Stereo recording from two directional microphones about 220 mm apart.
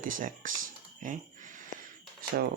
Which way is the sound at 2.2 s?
40° right (ahead or behind).